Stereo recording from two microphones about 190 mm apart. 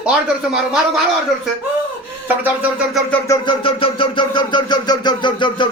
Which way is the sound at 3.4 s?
30° left (ahead or behind).